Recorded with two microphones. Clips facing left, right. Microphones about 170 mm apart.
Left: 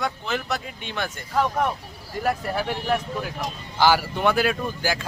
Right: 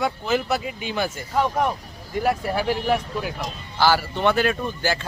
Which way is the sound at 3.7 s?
15° left (ahead or behind).